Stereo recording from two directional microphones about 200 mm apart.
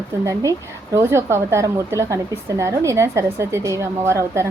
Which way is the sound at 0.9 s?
15° right (ahead or behind).